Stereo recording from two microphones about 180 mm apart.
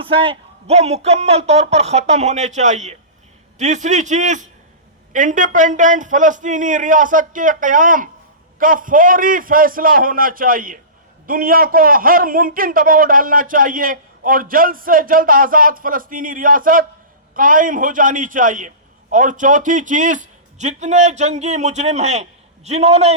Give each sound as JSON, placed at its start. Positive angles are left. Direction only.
{"t": 0.0, "sound": "a man's voice", "side_deg": -30}